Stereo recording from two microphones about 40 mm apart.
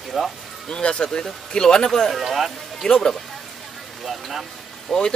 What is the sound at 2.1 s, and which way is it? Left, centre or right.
Speech, centre.